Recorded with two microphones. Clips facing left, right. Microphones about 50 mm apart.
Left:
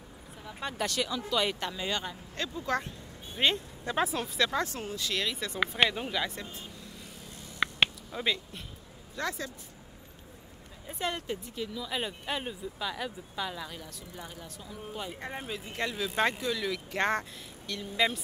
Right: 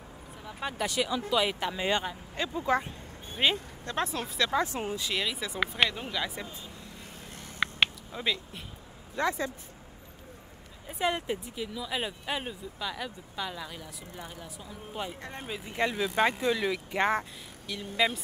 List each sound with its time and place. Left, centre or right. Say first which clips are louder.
0.5 s speech: right 1 dB; centre
1.8 s speech: right 8 dB; right
2.0 s speech: right 3 dB; centre
3.8 s speech: left 3 dB; centre
4.5 s speech: right 3 dB; centre
5.2 s speech: even; centre
7.6 s a sound: even; centre
9.1 s speech: right 5 dB; right
10.9 s speech: right 4 dB; centre
15.1 s speech: left 3 dB; centre
15.7 s speech: right 4 dB; right
17.0 s speech: right 2 dB; centre